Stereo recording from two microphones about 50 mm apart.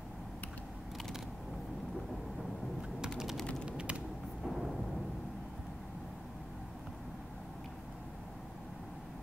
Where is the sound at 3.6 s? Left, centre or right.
Right.